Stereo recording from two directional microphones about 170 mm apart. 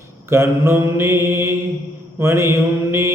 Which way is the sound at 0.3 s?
15° right (ahead or behind).